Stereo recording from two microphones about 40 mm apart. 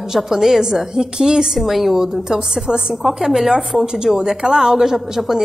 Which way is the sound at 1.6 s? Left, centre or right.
Centre.